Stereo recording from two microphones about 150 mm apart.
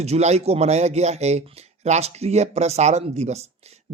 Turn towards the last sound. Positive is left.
turn(degrees=-45)  # may be behind; listen again after turning